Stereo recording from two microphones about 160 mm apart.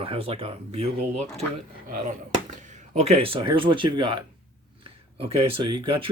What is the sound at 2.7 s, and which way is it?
Speech, 45° right (ahead or behind).